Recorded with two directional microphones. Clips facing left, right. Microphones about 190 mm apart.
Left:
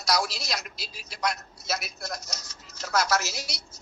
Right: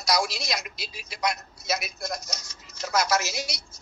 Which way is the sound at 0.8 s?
35° left (ahead or behind).